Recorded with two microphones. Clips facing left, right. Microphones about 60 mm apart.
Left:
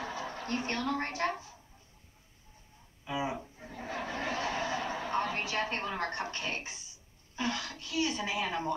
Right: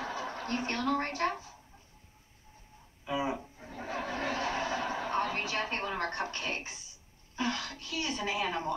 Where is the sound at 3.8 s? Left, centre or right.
Right.